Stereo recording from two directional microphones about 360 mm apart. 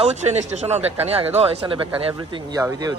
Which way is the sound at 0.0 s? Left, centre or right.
Centre.